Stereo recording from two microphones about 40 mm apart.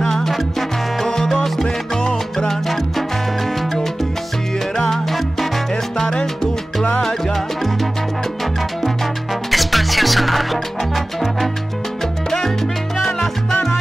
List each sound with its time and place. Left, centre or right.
0.0 s music: centre
0.3 s salsa music: centre
4.7 s salsa music: centre
5.7 s salsa music: centre
7.3 s salsa music: centre
8.8 s music: centre
12.0 s salsa music: centre